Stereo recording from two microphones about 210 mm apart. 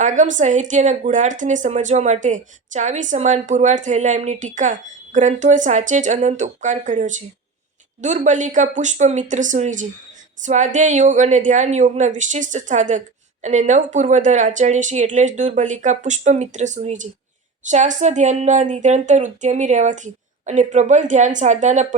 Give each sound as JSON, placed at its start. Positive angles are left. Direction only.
{"t": 0.0, "sound": "speech", "side_deg": -35}